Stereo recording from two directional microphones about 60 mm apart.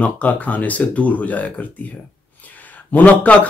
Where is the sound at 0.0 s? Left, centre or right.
Left.